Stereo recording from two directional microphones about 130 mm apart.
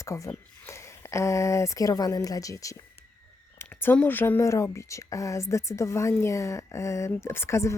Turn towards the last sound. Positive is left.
turn(degrees=20)  # may be behind; listen again after turning